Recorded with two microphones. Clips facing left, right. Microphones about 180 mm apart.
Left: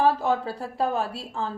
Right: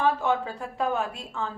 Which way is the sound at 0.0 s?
35° left (ahead or behind).